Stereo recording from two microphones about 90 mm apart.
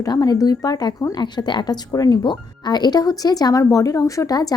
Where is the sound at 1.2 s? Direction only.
55° left (ahead or behind).